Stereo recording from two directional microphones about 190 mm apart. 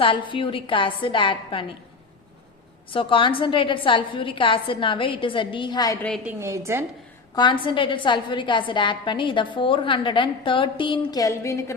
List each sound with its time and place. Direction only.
0.0 s a woman's voice: 25° left (ahead or behind)
2.9 s a woman's voice: 25° left (ahead or behind)
6.0 s a woman's voice: 5° left (ahead or behind)
6.2 s a woman's voice: 15° right (ahead or behind)
7.3 s a woman's voice: 25° left (ahead or behind)